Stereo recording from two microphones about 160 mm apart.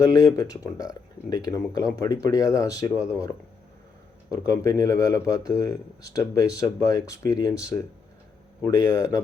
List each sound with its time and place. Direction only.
0.0 s speech: 20° left (ahead or behind)